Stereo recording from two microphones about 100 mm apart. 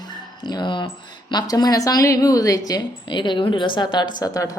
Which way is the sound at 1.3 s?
40° left (ahead or behind).